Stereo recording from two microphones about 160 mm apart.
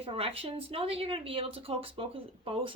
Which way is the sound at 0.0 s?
35° right (ahead or behind).